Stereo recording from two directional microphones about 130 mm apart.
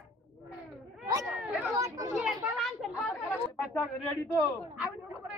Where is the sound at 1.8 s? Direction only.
25° right (ahead or behind).